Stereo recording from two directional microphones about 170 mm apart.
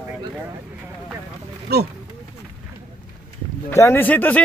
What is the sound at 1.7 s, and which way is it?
Speech, 70° right (ahead or behind).